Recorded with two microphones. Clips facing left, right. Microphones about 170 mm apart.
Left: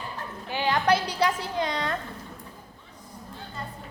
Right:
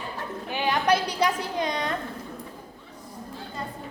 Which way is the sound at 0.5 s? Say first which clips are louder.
Even; 15° right (ahead or behind).